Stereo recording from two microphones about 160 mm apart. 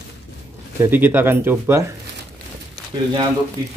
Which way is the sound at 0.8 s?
10° right (ahead or behind).